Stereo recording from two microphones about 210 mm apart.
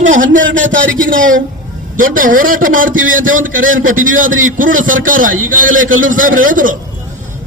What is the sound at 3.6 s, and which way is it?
Speech, 70° right (ahead or behind).